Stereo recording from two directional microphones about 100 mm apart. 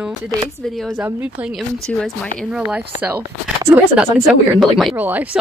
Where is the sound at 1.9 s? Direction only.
5° left (ahead or behind).